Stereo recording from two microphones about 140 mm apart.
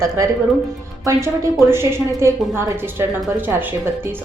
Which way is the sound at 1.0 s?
25° right (ahead or behind).